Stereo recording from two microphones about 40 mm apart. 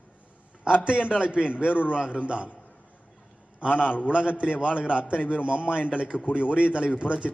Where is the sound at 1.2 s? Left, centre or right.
Right.